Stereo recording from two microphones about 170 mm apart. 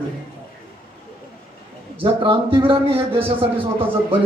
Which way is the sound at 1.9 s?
30° right (ahead or behind).